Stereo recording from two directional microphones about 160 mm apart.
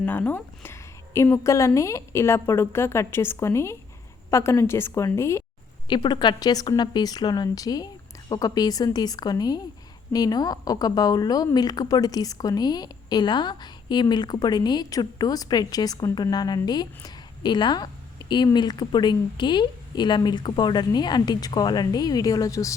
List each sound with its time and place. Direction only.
0.0 s a woman's voice: 10° left (ahead or behind)
5.9 s a woman's voice: 30° left (ahead or behind)